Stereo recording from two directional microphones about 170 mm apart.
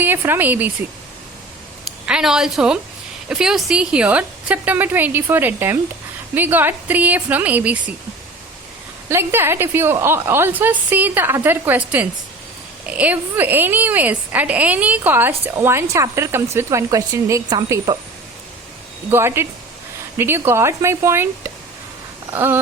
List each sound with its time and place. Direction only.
0.0 s a woman's voice: 10° right (ahead or behind)
2.0 s a woman's voice: 5° right (ahead or behind)
9.0 s a woman's voice: 15° right (ahead or behind)
19.1 s a woman's voice: 15° right (ahead or behind)
22.3 s a sound: 15° right (ahead or behind)